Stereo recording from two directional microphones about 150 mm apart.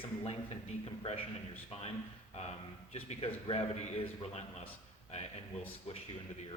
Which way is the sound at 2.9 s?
45° left (ahead or behind).